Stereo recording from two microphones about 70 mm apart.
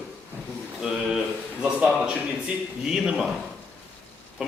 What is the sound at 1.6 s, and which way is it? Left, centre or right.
A man's voice, centre.